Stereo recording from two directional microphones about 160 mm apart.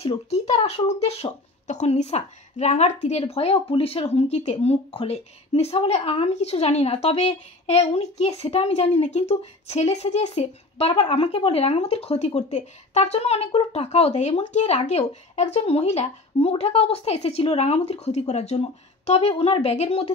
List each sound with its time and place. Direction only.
0.0 s speech: 40° left (ahead or behind)